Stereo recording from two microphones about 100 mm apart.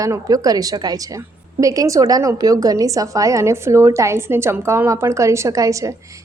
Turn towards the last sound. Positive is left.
turn(degrees=-30)  # may be behind; listen again after turning